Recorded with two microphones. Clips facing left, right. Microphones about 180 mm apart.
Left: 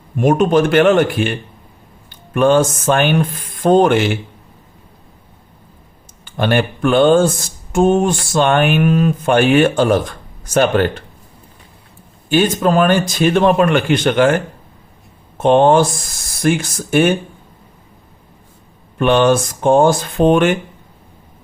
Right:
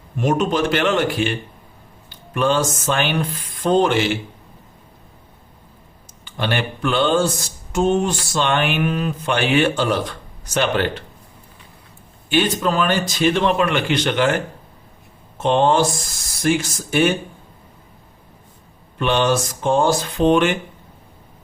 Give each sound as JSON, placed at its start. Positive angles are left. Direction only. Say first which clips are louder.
{"t": 0.2, "sound": "speech", "louder": "left 6 dB", "side_deg": 50}
{"t": 6.2, "sound": "speech", "louder": "left 7 dB", "side_deg": 50}
{"t": 12.3, "sound": "speech", "louder": "left 5 dB", "side_deg": 45}
{"t": 15.4, "sound": "speech", "louder": "left 6 dB", "side_deg": 50}
{"t": 18.9, "sound": "speech", "louder": "left 6 dB", "side_deg": 50}